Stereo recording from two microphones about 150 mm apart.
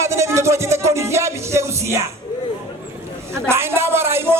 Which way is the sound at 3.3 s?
15° right (ahead or behind).